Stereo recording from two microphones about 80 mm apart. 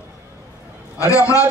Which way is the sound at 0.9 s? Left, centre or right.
Left.